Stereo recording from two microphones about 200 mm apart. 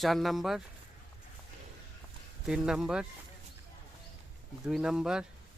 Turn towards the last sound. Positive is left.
turn(degrees=-5)  # may be behind; listen again after turning